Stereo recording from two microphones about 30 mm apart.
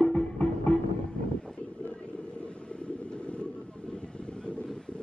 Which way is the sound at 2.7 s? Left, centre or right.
Left.